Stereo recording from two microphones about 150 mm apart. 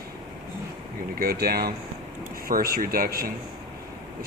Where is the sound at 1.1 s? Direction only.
85° right.